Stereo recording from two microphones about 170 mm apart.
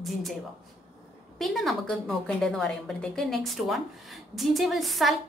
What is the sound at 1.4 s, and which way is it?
A woman's voice, centre (ahead or behind).